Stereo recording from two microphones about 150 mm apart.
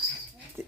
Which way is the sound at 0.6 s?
15° right (ahead or behind).